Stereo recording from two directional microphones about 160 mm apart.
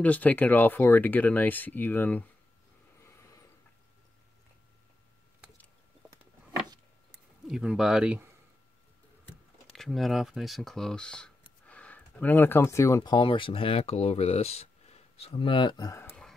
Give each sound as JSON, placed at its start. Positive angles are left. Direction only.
{"t": 0.0, "sound": "speech", "side_deg": 10}
{"t": 7.4, "sound": "speech", "side_deg": -5}
{"t": 9.7, "sound": "speech", "side_deg": 0}